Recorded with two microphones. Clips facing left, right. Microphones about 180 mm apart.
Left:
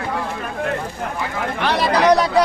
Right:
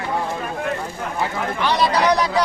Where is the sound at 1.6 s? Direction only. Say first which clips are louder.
Left 2 dB; 60° left (ahead or behind).